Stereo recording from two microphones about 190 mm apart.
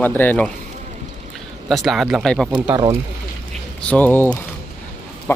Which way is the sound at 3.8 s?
10° left (ahead or behind).